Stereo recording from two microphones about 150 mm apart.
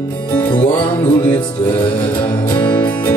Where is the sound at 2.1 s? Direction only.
35° left (ahead or behind).